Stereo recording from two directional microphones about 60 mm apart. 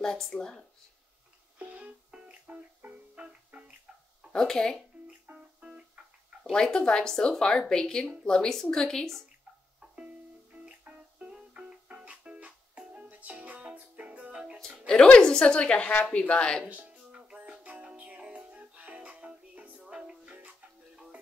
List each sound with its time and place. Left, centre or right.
0.0 s speech: centre
1.6 s music: right
2.8 s music: right
3.2 s music: right
4.3 s speech: centre
5.6 s music: centre
6.4 s speech: centre
9.8 s music: right
14.9 s speech: centre
16.6 s music: right